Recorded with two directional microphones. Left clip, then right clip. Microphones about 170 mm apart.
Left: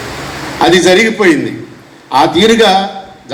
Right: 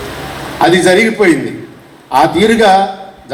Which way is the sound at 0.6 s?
60° right (ahead or behind).